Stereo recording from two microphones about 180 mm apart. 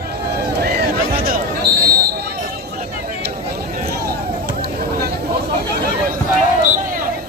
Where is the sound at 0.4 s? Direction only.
60° right (ahead or behind).